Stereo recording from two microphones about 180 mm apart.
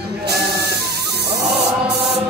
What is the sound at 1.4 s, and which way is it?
Spray, 65° right (ahead or behind).